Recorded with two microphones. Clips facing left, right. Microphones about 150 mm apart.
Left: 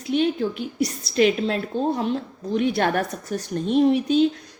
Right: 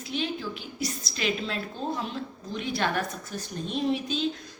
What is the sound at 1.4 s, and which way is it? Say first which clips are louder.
Speech: left 9 dB; 35° left (ahead or behind).